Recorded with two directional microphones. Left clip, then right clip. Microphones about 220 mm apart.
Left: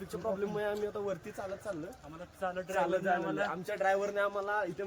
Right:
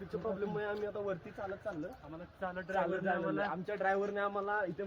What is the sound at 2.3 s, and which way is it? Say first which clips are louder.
Speech: left 4 dB; 5° left (ahead or behind).